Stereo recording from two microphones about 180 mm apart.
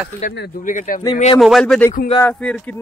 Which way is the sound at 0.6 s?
50° left (ahead or behind).